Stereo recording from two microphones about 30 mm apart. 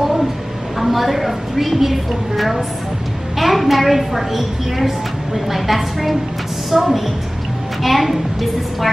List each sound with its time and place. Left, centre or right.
0.7 s a woman's voice: centre